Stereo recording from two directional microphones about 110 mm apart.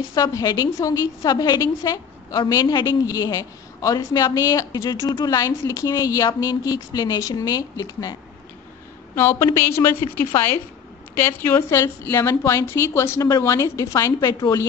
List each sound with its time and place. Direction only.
0.1 s a woman's voice: 35° left (ahead or behind)
9.1 s a woman's voice: 25° left (ahead or behind)